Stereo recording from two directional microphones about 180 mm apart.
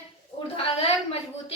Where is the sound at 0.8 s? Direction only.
35° left (ahead or behind).